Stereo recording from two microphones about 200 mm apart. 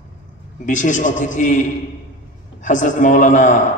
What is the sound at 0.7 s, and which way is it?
A man's voice, 40° left (ahead or behind).